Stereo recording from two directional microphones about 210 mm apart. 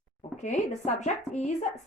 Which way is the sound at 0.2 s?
35° left (ahead or behind).